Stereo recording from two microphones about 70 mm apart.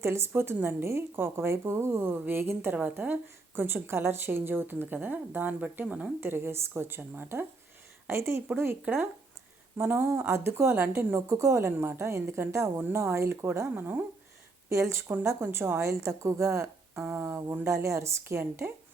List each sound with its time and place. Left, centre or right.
0.0 s a woman's voice: right
6.1 s speech: right
10.1 s a woman's voice: right
14.7 s a woman's voice: right